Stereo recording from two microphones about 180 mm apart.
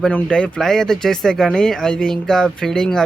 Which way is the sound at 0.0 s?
5° left (ahead or behind).